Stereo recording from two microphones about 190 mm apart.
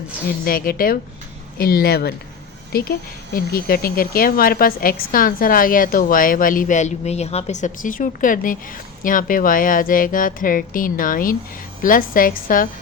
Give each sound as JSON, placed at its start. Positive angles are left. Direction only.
{"t": 0.4, "sound": "speech", "side_deg": 50}